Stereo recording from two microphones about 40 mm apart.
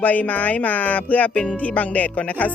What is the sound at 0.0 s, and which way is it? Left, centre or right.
Speech, left.